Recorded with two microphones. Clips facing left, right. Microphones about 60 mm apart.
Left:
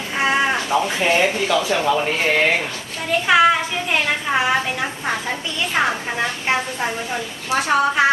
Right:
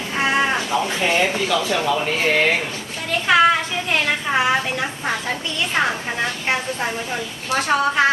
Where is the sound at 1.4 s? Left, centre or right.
Centre.